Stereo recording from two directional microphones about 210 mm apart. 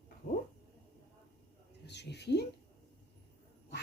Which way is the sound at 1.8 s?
55° left (ahead or behind).